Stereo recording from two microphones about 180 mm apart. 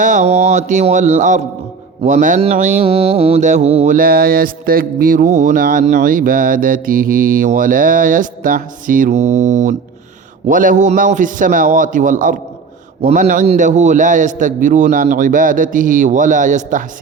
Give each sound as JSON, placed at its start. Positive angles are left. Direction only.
{"t": 0.0, "sound": "mantra", "side_deg": -45}
{"t": 2.8, "sound": "mantra", "side_deg": -35}
{"t": 3.9, "sound": "mantra", "side_deg": -55}